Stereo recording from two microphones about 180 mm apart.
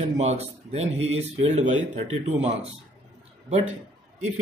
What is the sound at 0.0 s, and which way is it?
Speech, 35° right (ahead or behind).